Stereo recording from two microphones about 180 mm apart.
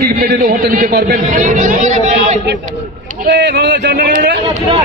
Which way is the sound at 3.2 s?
70° right (ahead or behind).